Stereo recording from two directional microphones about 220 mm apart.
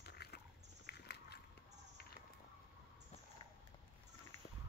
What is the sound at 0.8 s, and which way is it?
Walk, 50° left (ahead or behind).